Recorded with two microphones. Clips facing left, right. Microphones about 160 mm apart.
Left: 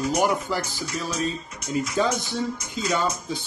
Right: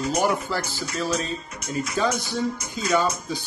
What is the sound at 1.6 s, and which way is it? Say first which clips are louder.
Speech: left 2 dB; 60° right (ahead or behind).